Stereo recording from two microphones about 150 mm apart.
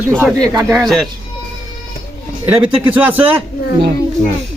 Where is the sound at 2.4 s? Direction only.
10° right (ahead or behind).